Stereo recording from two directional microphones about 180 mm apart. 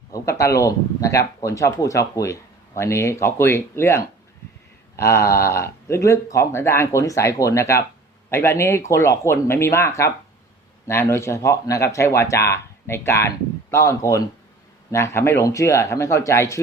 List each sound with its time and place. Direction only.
0.1 s speech: 15° left (ahead or behind)